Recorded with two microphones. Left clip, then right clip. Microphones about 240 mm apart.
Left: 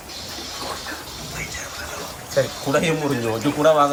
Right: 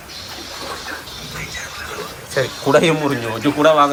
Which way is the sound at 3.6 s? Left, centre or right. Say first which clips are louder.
Right 3 dB; centre.